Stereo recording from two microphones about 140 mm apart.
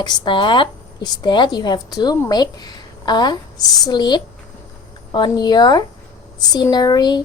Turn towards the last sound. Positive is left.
turn(degrees=30)  # may be behind; listen again after turning